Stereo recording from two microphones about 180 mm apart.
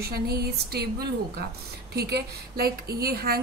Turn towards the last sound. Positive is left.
turn(degrees=-60)  # may be behind; listen again after turning